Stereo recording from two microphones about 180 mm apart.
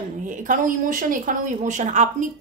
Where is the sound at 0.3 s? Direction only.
50° right (ahead or behind).